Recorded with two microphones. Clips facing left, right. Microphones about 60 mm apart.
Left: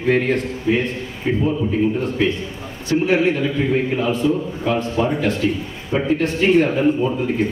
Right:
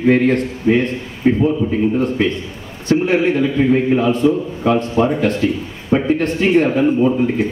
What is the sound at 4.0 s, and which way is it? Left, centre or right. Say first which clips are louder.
A man's voice: right 4 dB; right.